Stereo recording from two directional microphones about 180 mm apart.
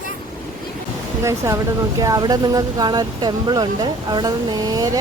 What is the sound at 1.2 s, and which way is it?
Speech, 15° right (ahead or behind).